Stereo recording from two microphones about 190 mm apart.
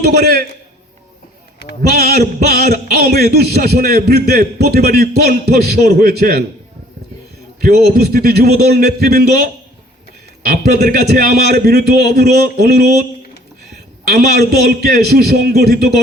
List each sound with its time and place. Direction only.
0.0 s a man's voice: 55° right (ahead or behind)
2.5 s a man's voice: 55° right (ahead or behind)
7.6 s a man's voice: 55° right (ahead or behind)